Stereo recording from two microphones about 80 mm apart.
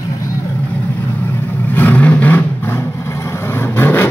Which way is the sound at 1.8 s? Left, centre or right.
Left.